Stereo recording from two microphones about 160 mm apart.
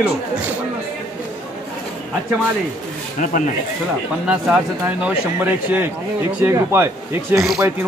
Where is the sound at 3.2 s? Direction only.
50° left (ahead or behind).